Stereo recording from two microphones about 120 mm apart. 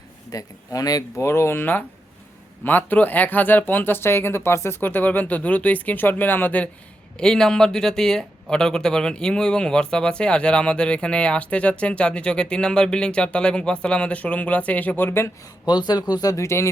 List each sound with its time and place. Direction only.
0.3 s speech: 30° left (ahead or behind)
15.6 s speech: 35° left (ahead or behind)